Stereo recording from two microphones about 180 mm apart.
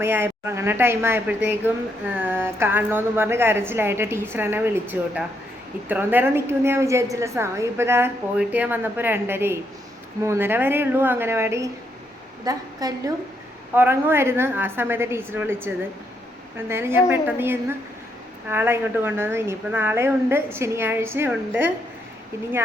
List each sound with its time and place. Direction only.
0.0 s a woman's voice: 15° right (ahead or behind)
16.6 s a woman's voice: 15° right (ahead or behind)